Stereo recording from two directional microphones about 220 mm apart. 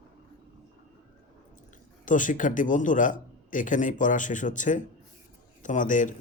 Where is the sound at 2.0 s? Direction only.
35° left (ahead or behind).